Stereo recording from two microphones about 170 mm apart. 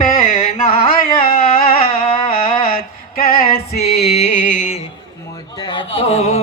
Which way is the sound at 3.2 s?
65° left (ahead or behind).